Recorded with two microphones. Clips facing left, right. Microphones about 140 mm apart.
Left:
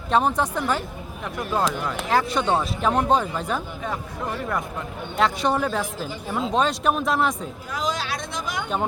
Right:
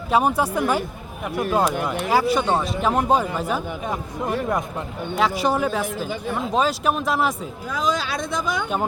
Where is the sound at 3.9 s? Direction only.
15° right (ahead or behind).